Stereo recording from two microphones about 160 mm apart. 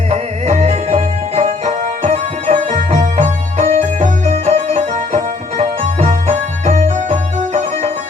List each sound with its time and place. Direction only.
0.1 s music: 40° right (ahead or behind)